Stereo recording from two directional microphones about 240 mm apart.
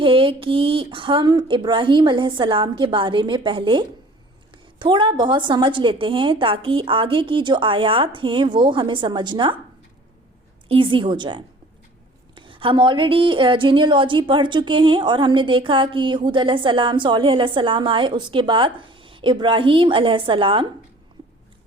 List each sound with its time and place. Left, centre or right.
0.0 s a woman's voice: right
10.7 s a woman's voice: right